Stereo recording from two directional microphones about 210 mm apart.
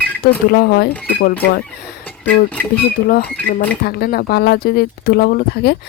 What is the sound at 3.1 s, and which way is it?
Speech, 45° left (ahead or behind).